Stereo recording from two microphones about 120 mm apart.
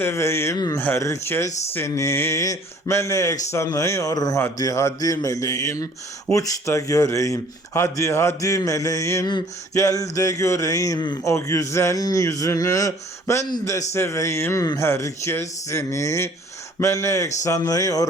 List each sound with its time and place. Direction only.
0.0 s a man's voice: 20° left (ahead or behind)
0.8 s a man's voice: 15° left (ahead or behind)